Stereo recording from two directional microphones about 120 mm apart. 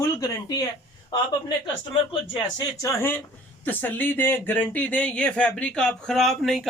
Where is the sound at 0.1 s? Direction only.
30° left (ahead or behind).